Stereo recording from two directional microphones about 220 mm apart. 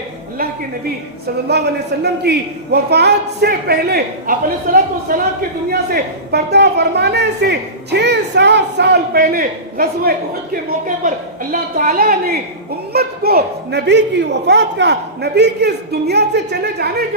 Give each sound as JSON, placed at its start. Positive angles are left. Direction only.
{"t": 2.2, "sound": "a woman's voice", "side_deg": -50}